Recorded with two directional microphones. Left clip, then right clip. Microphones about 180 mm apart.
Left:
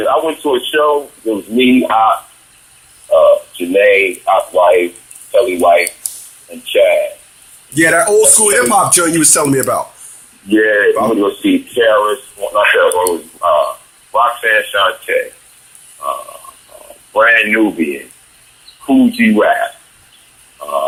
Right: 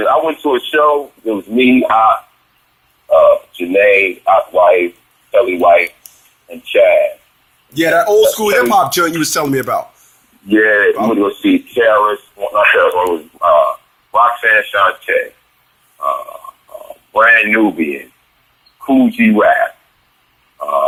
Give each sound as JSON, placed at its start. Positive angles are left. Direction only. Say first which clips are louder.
{"t": 0.0, "sound": "speech", "louder": "right 1 dB", "side_deg": -25}
{"t": 7.8, "sound": "speech", "louder": "even", "side_deg": -35}
{"t": 16.0, "sound": "purr", "louder": "right 3 dB", "side_deg": -25}
{"t": 18.9, "sound": "speech", "louder": "even", "side_deg": -25}